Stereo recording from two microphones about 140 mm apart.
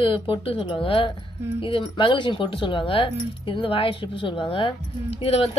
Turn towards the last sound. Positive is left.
turn(degrees=45)  # may be behind; listen again after turning